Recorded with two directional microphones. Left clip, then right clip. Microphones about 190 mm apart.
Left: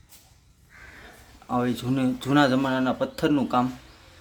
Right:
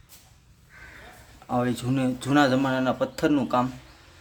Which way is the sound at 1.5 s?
Centre (ahead or behind).